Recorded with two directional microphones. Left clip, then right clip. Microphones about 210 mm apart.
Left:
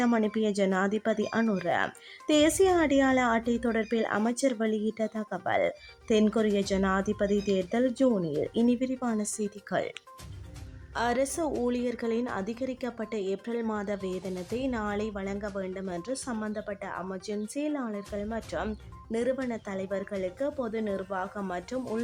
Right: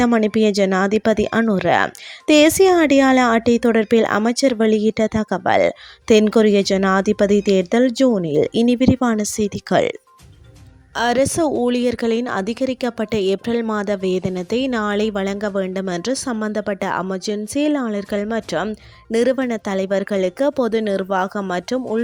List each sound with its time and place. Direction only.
0.0 s speech: 35° right (ahead or behind)
10.9 s speech: 40° right (ahead or behind)